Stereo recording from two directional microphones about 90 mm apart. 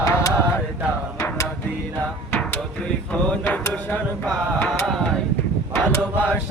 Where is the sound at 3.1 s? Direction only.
15° left (ahead or behind).